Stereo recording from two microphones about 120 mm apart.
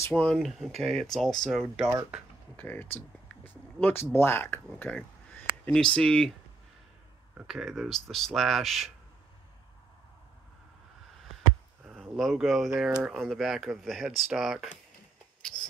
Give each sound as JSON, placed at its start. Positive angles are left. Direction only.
{"t": 0.1, "sound": "speech", "side_deg": 5}
{"t": 2.5, "sound": "speech", "side_deg": 15}
{"t": 7.3, "sound": "speech", "side_deg": -5}
{"t": 11.8, "sound": "speech", "side_deg": 0}